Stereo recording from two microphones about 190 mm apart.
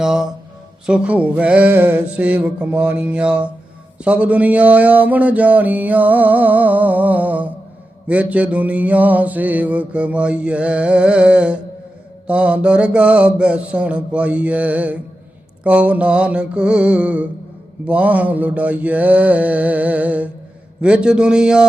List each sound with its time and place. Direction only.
0.0 s mantra: 5° right (ahead or behind)